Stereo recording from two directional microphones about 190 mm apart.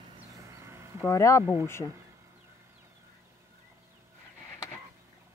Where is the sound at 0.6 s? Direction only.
15° right (ahead or behind).